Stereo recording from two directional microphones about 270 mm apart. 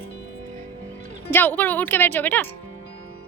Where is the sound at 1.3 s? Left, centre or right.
Centre.